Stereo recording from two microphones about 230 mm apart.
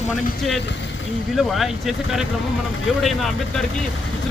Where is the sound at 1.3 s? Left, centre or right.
Centre.